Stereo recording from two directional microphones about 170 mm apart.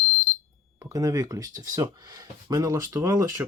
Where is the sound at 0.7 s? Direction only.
20° right (ahead or behind).